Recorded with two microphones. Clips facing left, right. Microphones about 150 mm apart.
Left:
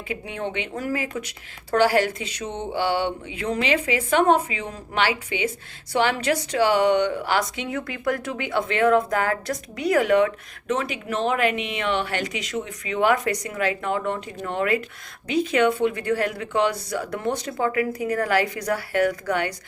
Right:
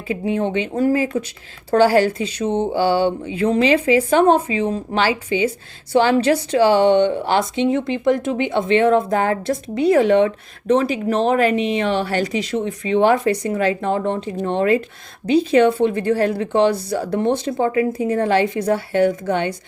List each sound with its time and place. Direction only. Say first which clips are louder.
0.1 s a woman's voice: right 10 dB; 30° right (ahead or behind)